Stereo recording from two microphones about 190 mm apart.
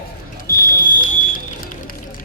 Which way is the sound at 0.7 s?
45° left (ahead or behind).